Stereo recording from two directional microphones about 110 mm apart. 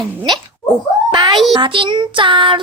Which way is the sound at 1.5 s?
50° right (ahead or behind).